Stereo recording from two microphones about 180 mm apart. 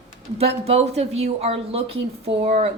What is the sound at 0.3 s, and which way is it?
Speech, 35° right (ahead or behind).